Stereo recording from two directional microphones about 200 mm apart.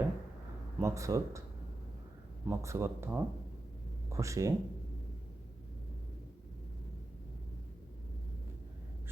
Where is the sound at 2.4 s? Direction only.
15° right (ahead or behind).